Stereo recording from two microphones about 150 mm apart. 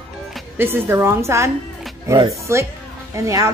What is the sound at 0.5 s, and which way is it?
A woman's voice, 15° right (ahead or behind).